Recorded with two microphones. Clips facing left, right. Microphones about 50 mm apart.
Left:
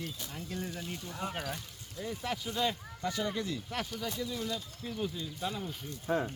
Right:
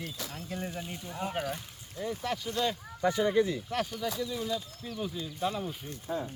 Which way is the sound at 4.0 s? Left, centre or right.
Centre.